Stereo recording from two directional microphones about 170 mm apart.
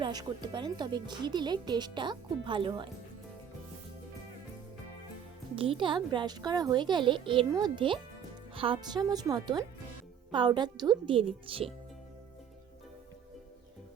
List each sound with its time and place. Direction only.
0.0 s speech: 25° right (ahead or behind)
5.5 s speech: 30° right (ahead or behind)